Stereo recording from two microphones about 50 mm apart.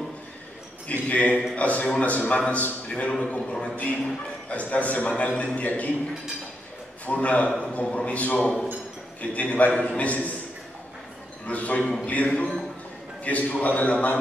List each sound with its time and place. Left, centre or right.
0.8 s a man's voice: left
5.4 s a man's voice: left
7.1 s a man's voice: left
11.4 s a man's voice: left